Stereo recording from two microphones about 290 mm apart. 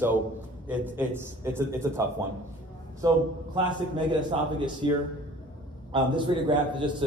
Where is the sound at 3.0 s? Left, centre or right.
Centre.